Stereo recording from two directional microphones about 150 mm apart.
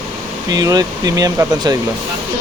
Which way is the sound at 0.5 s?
25° right (ahead or behind).